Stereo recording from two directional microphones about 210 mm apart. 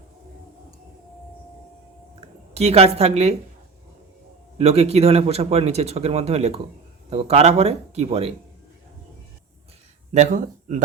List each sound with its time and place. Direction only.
2.6 s speech: 30° right (ahead or behind)
4.5 s speech: 30° right (ahead or behind)
10.1 s speech: 35° right (ahead or behind)